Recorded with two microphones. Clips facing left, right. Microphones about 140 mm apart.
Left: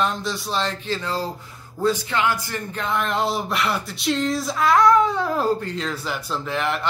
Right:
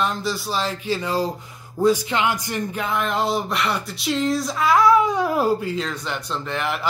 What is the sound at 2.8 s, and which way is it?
Speech, centre (ahead or behind).